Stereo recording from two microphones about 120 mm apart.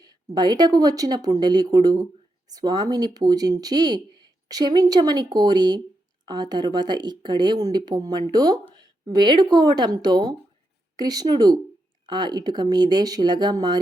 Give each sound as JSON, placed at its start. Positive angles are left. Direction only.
{"t": 0.0, "sound": "speech", "side_deg": -35}